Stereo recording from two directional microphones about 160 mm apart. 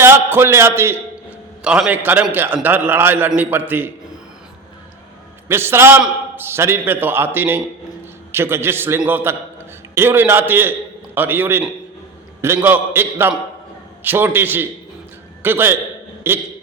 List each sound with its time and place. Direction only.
0.0 s a man's voice: 15° right (ahead or behind)
5.5 s a man's voice: 15° right (ahead or behind)